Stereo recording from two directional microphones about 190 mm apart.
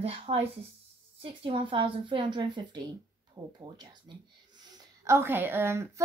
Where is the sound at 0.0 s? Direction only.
30° right (ahead or behind).